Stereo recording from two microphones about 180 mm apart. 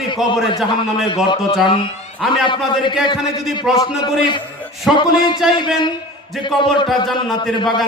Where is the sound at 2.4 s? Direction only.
25° left (ahead or behind).